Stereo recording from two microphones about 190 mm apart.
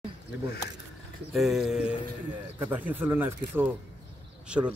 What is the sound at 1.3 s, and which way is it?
A man's voice, centre (ahead or behind).